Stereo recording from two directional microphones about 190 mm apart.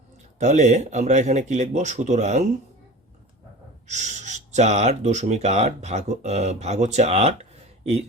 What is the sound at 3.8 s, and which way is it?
Speech, 40° right (ahead or behind).